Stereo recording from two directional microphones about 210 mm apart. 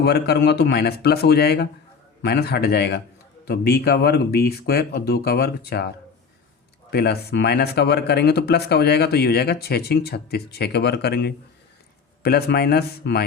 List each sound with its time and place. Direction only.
0.0 s speech: 50° left (ahead or behind)
6.9 s speech: 50° left (ahead or behind)